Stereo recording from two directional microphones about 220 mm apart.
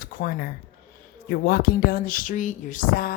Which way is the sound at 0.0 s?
40° left (ahead or behind).